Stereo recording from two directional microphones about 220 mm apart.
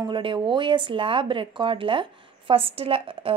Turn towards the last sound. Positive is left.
turn(degrees=-25)  # may be behind; listen again after turning